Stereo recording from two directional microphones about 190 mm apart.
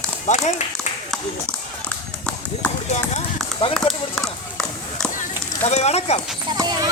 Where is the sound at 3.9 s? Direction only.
30° left (ahead or behind).